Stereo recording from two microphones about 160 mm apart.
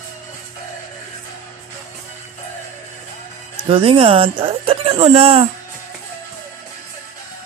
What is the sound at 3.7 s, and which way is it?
Speech, 35° right (ahead or behind).